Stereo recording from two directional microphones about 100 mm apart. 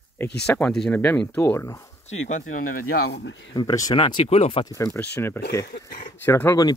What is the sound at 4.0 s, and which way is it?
Speech, 60° left (ahead or behind).